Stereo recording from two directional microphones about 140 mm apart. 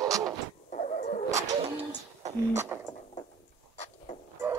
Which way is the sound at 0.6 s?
60° left (ahead or behind).